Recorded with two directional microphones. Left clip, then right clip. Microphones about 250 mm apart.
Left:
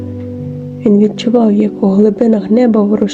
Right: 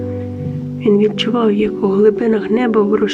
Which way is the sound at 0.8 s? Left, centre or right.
Centre.